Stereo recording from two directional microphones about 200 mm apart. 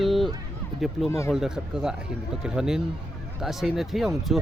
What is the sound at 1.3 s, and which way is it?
Speech, 5° right (ahead or behind).